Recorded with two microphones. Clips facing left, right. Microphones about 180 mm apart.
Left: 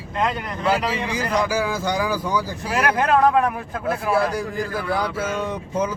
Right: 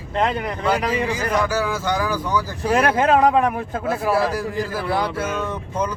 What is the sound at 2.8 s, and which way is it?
Speech, 20° right (ahead or behind).